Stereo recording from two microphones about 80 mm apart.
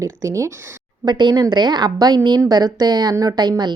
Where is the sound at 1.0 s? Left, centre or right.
Right.